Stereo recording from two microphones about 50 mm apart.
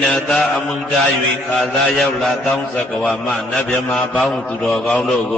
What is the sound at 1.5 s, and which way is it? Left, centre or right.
Mantra, centre.